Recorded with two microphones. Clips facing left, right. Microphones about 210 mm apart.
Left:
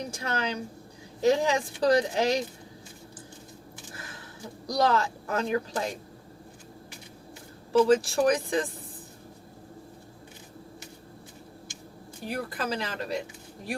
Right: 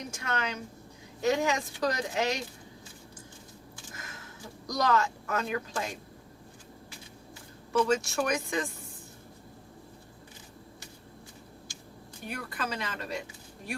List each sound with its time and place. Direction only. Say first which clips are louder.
0.1 s a woman's voice: even; 35° left (ahead or behind)
4.6 s a woman's voice: left 2 dB; 30° left (ahead or behind)
7.7 s a woman's voice: left 6 dB; 35° left (ahead or behind)
12.2 s a woman's voice: left 4 dB; 35° left (ahead or behind)